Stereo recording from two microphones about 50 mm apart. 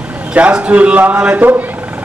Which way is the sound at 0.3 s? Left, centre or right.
Right.